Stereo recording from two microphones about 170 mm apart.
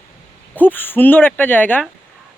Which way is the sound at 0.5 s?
10° left (ahead or behind).